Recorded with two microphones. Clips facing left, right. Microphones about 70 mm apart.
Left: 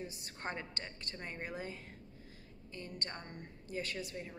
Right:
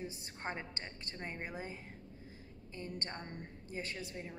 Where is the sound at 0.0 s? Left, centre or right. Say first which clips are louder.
Even; right.